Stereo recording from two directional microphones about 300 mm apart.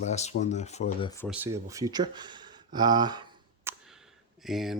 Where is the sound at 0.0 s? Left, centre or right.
Left.